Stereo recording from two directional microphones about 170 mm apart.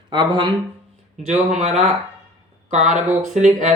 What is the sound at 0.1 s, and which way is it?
Speech, 25° right (ahead or behind).